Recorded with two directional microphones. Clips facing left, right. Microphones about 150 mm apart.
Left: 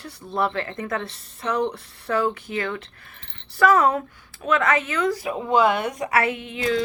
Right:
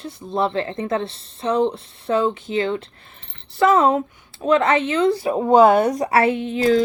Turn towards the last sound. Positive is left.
turn(degrees=-35)  # may be behind; listen again after turning